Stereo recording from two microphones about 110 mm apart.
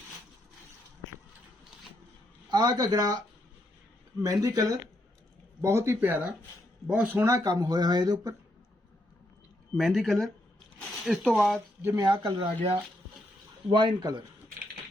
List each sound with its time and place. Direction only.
2.5 s speech: 40° right (ahead or behind)
4.2 s speech: 30° right (ahead or behind); by 7.2 s 10° right (ahead or behind)
7.2 s speech: 30° right (ahead or behind)
9.7 s speech: centre (ahead or behind)
12.2 s speech: 55° right (ahead or behind)
13.7 s speech: 40° right (ahead or behind)